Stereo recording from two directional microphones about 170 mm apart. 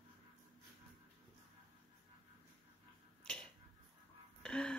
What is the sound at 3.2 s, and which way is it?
Finger snapping, 5° left (ahead or behind).